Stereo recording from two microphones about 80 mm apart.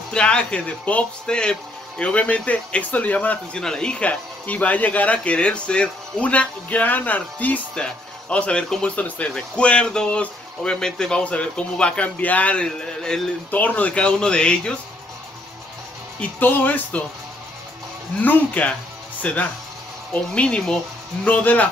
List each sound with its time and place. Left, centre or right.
0.1 s speech: centre
13.5 s speech: left
16.2 s speech: left
18.2 s speech: left